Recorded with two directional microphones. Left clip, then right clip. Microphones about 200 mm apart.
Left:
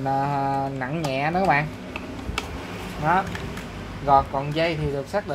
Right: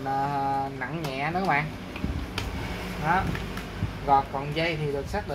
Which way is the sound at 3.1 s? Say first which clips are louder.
Left 4 dB; 40° left (ahead or behind).